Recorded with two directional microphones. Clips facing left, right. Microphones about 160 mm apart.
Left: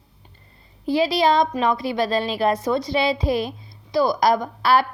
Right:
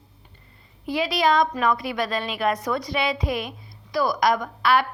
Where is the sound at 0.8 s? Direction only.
30° left (ahead or behind).